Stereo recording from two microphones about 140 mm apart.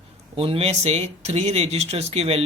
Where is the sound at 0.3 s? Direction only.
40° right (ahead or behind).